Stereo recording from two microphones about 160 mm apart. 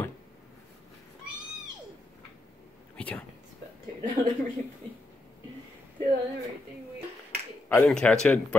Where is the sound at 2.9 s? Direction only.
10° left (ahead or behind).